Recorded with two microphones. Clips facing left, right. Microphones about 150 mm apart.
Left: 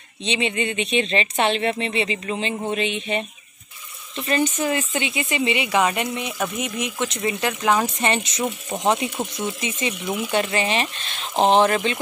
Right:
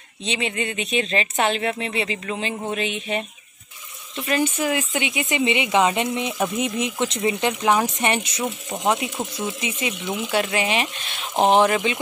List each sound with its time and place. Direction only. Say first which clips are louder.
0.2 s mantra: left 2 dB; centre (ahead or behind)
4.2 s speech: even; 10° right (ahead or behind)
8.5 s speech: left 1 dB; 15° left (ahead or behind)
8.8 s mantra: left 1 dB; centre (ahead or behind)
9.4 s speech: even; 10° right (ahead or behind)